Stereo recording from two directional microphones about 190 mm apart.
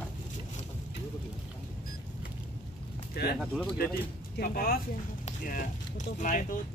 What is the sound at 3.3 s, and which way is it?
Speech, centre (ahead or behind).